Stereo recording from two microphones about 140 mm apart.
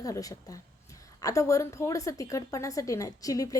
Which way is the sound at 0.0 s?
25° left (ahead or behind).